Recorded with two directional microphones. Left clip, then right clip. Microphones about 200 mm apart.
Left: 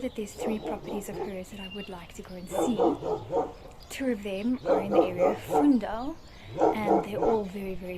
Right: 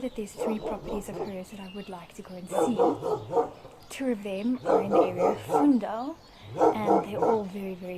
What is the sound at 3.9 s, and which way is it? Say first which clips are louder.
Speech: even; 5° right (ahead or behind).